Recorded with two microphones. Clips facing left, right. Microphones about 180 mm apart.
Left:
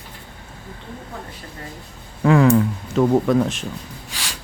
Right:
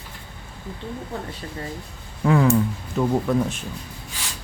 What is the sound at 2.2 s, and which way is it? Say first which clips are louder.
Speech: left 4 dB; 90° left.